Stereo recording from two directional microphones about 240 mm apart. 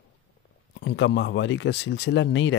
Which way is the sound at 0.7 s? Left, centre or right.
Left.